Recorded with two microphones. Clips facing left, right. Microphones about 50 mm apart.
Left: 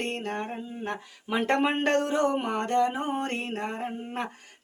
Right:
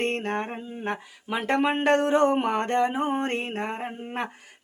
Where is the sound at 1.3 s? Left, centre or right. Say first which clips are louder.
Right 1 dB; centre.